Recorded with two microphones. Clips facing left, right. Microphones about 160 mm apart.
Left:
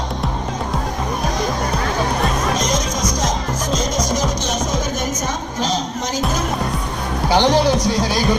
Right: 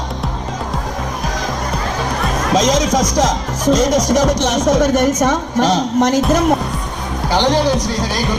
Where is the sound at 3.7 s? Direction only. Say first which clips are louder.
Right 7 dB; 80° right.